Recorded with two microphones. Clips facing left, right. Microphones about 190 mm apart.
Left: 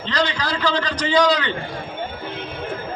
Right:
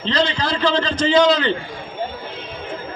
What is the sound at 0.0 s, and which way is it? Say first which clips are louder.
A man's voice: right 3 dB; 25° right (ahead or behind).